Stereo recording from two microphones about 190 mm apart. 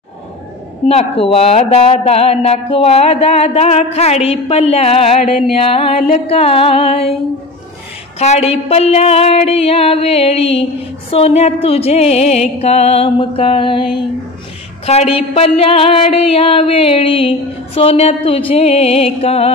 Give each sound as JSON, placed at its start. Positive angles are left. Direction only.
{"t": 0.8, "sound": "a woman's voice", "side_deg": 30}
{"t": 8.2, "sound": "a woman's voice", "side_deg": 35}
{"t": 14.9, "sound": "a woman's voice", "side_deg": 30}